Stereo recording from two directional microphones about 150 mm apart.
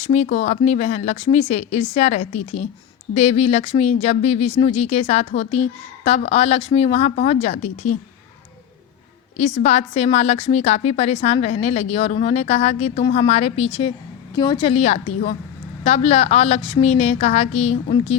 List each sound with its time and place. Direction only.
0.0 s a woman's voice: 50° left (ahead or behind)
9.6 s a woman's voice: 50° left (ahead or behind)
14.3 s a woman's voice: 30° left (ahead or behind)
14.7 s a woman's voice: 45° left (ahead or behind)